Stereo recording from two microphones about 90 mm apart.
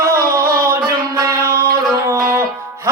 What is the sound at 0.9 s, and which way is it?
Music, 30° right (ahead or behind).